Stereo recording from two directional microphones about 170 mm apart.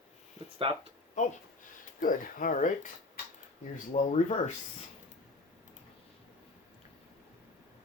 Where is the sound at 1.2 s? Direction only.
50° left (ahead or behind).